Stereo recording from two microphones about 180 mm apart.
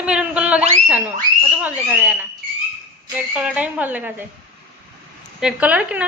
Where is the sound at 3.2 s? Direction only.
5° right (ahead or behind).